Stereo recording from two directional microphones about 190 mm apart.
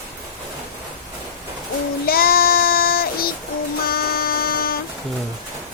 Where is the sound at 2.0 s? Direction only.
50° left (ahead or behind).